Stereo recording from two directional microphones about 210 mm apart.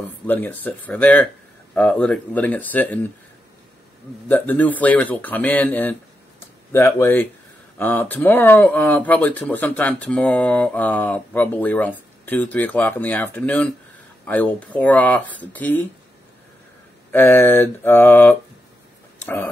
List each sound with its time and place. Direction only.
0.3 s speech: 10° left (ahead or behind)
4.3 s speech: 10° left (ahead or behind)
17.1 s speech: 10° left (ahead or behind)